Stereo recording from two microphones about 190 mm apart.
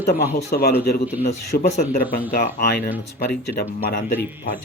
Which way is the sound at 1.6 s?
45° left (ahead or behind).